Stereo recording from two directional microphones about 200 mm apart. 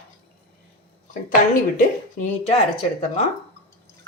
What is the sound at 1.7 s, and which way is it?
Speech, 40° left (ahead or behind).